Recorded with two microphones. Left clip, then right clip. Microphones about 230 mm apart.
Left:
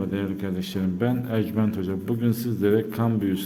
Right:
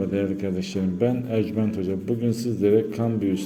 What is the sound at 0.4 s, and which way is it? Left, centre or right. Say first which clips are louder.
A man's voice: right 2 dB; centre.